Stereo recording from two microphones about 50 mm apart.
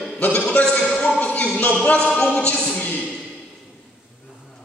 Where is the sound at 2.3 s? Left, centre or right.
Left.